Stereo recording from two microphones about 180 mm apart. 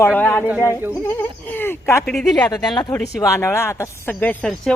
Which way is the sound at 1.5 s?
10° left (ahead or behind).